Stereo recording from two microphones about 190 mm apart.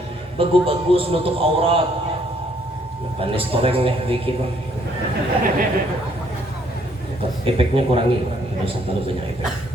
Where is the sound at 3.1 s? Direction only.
30° right (ahead or behind).